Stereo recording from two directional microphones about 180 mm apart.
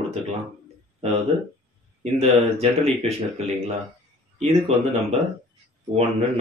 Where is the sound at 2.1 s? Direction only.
35° right (ahead or behind).